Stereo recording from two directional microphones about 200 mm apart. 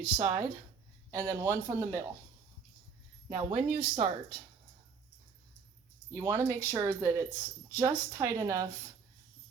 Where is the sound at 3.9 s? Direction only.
30° right (ahead or behind).